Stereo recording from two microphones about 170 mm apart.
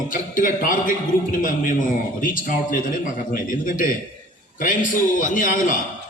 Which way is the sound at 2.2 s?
55° left (ahead or behind).